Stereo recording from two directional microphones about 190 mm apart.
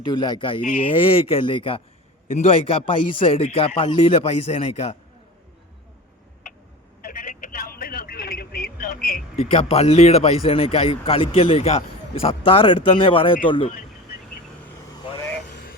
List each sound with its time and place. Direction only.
0.1 s a man's voice: 25° left (ahead or behind)
7.0 s telephone: 50° left (ahead or behind)
7.8 s a sound: 50° left (ahead or behind)
9.3 s a man's voice: 30° left (ahead or behind)